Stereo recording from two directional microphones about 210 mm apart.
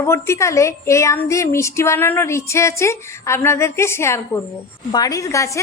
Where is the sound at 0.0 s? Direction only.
15° left (ahead or behind).